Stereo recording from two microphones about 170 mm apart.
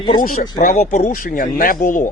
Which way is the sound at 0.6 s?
50° left (ahead or behind).